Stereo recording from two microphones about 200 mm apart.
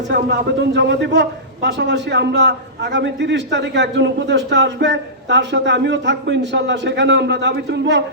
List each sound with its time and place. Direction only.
0.1 s a man's voice: 60° right (ahead or behind)